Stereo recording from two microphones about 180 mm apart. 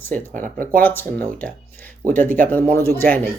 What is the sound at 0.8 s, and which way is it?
Speech, 10° left (ahead or behind).